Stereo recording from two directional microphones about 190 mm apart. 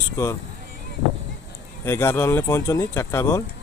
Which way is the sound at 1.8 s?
15° left (ahead or behind).